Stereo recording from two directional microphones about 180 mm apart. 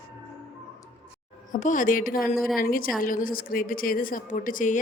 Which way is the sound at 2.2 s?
Centre (ahead or behind).